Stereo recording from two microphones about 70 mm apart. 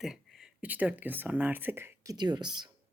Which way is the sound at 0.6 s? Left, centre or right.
Right.